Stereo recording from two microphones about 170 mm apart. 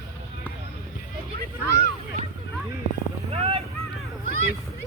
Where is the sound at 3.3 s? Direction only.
35° right (ahead or behind).